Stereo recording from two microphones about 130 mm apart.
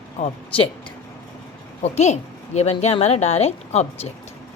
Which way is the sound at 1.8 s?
60° left (ahead or behind).